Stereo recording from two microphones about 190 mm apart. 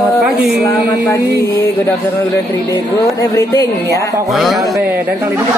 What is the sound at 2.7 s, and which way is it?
Speech, 15° left (ahead or behind).